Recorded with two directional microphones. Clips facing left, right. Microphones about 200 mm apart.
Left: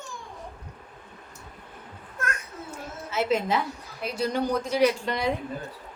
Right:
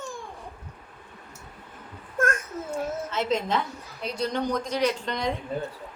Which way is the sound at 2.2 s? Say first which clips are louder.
Right 8 dB; 50° right (ahead or behind).